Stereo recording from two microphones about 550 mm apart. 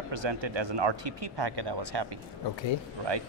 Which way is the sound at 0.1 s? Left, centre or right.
Right.